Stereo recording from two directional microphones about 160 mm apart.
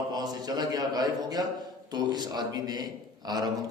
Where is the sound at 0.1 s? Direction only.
25° right (ahead or behind).